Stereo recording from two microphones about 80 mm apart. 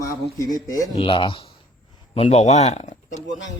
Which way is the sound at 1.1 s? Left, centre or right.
Left.